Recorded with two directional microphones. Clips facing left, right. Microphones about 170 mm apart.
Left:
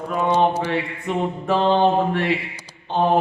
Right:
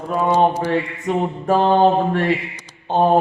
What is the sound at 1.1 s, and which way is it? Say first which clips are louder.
A capella: right 4 dB; 40° right (ahead or behind).